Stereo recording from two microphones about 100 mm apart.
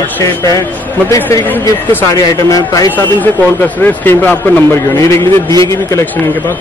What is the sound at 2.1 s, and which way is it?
Speech, 35° left (ahead or behind).